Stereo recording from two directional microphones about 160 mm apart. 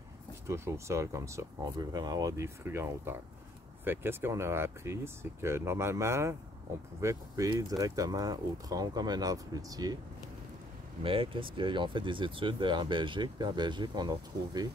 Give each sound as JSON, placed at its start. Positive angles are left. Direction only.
{"t": 0.5, "sound": "speech", "side_deg": -15}
{"t": 11.1, "sound": "speech", "side_deg": -35}